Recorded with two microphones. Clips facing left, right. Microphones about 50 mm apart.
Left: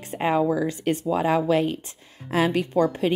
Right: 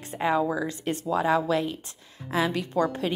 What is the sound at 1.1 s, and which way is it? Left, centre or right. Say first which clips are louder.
Speech: left 2 dB; left.